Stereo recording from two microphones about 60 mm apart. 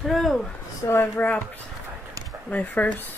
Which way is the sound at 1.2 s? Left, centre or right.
Left.